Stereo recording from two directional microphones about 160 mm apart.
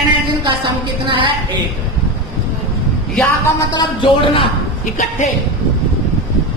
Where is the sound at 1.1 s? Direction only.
30° right (ahead or behind).